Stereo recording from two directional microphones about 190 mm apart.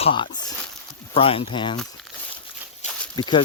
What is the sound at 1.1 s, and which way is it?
Speech, 30° left (ahead or behind).